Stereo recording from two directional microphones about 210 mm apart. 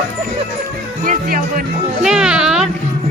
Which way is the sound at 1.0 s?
40° right (ahead or behind).